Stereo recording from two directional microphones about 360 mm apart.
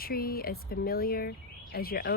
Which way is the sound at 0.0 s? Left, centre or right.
Left.